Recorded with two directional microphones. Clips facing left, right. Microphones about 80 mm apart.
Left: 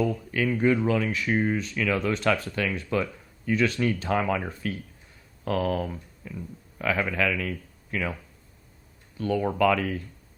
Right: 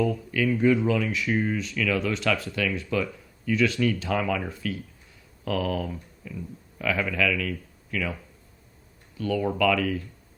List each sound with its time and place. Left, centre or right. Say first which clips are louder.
0.3 s speech: right 2 dB; left
9.1 s speech: left 1 dB; left